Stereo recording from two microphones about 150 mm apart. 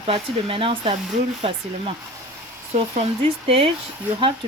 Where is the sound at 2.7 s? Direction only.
45° right (ahead or behind).